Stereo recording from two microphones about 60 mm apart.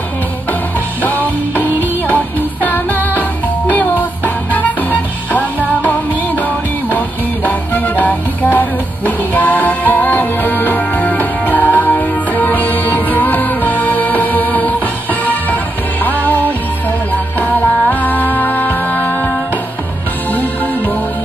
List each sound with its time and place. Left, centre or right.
2.0 s music: left
5.8 s music: left